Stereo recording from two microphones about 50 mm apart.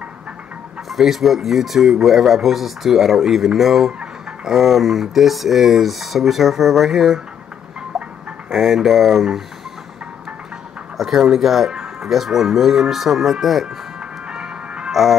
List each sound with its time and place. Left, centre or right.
0.8 s speech: centre
7.9 s music: centre
8.5 s speech: centre
11.0 s speech: centre
14.3 s music: centre
14.9 s music: centre